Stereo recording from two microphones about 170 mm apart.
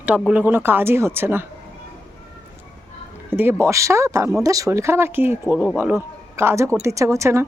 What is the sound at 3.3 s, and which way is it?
Speech, 10° right (ahead or behind).